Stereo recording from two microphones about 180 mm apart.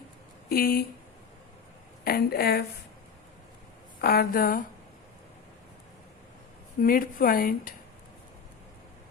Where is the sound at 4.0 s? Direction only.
60° left (ahead or behind).